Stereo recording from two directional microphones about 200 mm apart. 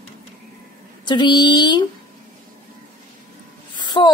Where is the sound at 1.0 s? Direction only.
20° left (ahead or behind).